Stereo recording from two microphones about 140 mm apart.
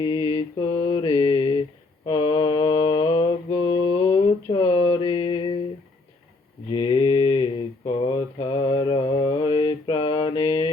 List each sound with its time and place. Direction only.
0.0 s mantra: 35° left (ahead or behind)
6.7 s mantra: 35° left (ahead or behind)